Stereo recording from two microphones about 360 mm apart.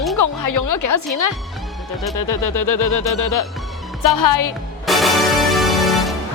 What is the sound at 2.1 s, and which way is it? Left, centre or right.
Speech, left.